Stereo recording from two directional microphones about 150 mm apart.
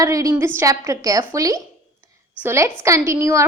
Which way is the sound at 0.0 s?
20° right (ahead or behind).